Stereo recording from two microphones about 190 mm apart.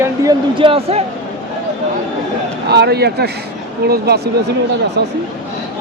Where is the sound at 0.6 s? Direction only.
30° right (ahead or behind).